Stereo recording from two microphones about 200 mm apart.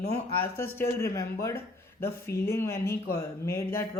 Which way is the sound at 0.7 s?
15° left (ahead or behind).